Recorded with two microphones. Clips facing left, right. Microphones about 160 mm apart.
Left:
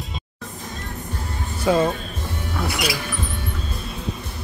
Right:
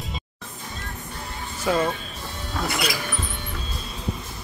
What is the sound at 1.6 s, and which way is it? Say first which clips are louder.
Speech: left 4 dB; 25° left (ahead or behind).